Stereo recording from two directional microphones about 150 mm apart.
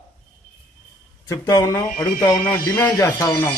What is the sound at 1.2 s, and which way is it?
A man's voice, 20° left (ahead or behind).